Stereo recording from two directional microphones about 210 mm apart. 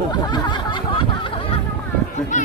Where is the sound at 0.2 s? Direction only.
20° left (ahead or behind).